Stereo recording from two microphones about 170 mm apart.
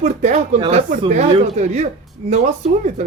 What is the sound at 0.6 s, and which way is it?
Speech, 30° right (ahead or behind).